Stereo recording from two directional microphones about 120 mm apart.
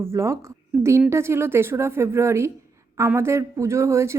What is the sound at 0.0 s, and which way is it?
Speech, 25° right (ahead or behind).